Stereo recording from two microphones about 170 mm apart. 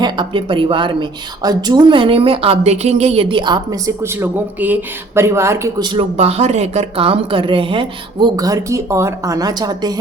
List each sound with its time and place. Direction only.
0.0 s a woman's voice: 30° right (ahead or behind)
6.1 s a woman's voice: 40° right (ahead or behind); by 10.0 s 25° right (ahead or behind)